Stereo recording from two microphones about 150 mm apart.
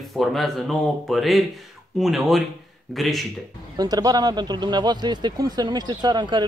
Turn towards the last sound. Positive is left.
turn(degrees=-30)  # may be behind; listen again after turning